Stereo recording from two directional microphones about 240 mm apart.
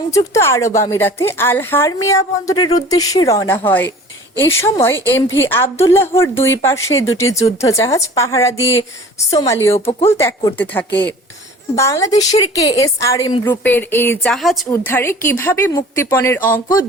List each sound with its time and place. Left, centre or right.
0.1 s a woman's voice: centre
9.7 s speech: left
10.1 s a woman's voice: centre